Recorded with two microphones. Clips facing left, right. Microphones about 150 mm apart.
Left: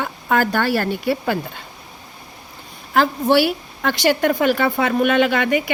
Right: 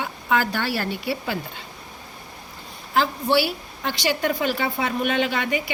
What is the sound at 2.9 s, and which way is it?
A woman's voice, 55° left (ahead or behind).